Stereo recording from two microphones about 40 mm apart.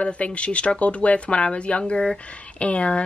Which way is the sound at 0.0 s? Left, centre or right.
Left.